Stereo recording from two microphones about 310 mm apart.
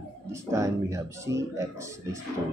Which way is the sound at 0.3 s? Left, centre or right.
Centre.